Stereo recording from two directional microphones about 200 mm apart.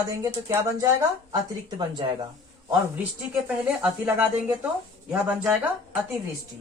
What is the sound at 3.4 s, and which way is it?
Speech, 10° right (ahead or behind).